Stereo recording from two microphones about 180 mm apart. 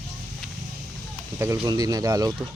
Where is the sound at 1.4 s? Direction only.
20° right (ahead or behind).